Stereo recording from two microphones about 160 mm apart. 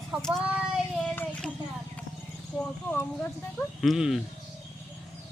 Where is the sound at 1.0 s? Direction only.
10° left (ahead or behind).